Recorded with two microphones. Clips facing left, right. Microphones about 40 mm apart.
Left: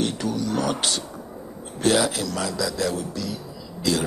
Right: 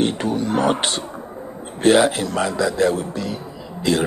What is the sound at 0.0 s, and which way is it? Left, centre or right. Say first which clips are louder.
A man's voice: right 5 dB; right.